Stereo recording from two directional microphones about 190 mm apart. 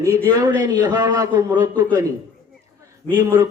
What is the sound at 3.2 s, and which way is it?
Speech, 20° right (ahead or behind).